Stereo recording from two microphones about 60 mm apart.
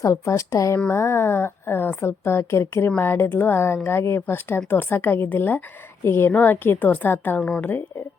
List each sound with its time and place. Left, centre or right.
0.0 s speech: left
0.9 s a woman's voice: left